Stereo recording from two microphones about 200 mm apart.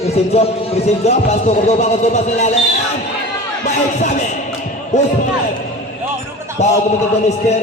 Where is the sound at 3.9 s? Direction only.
35° left (ahead or behind).